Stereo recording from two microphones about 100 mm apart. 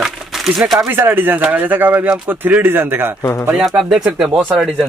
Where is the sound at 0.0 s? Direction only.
5° right (ahead or behind).